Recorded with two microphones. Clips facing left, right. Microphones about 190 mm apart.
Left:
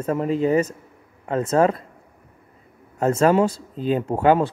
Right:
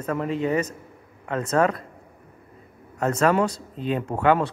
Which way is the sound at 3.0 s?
30° left (ahead or behind).